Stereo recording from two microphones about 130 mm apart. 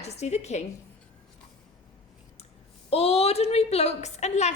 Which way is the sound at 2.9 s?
50° left (ahead or behind).